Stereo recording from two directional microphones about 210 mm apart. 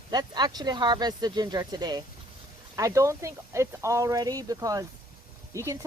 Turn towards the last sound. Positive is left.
turn(degrees=-15)  # may be behind; listen again after turning